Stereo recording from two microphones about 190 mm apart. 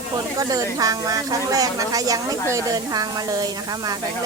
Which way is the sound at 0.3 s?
20° right (ahead or behind).